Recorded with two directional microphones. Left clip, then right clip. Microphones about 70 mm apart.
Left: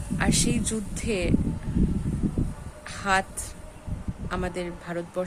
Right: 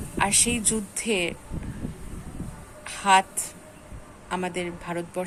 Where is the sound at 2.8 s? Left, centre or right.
Centre.